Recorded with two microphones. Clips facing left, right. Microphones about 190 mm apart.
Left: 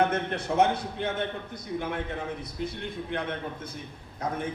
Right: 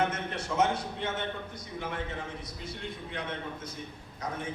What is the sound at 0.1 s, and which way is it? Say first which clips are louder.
Speech: left 6 dB; 60° left (ahead or behind).